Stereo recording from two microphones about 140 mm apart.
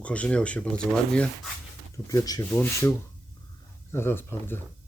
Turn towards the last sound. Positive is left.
turn(degrees=15)  # may be behind; listen again after turning